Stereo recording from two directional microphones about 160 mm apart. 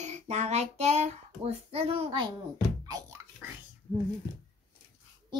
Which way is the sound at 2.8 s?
20° right (ahead or behind).